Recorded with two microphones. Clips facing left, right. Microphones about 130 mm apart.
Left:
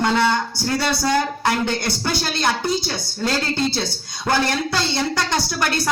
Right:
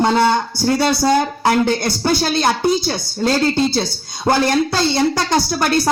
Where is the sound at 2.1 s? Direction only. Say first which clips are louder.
Right 5 dB; 10° right (ahead or behind).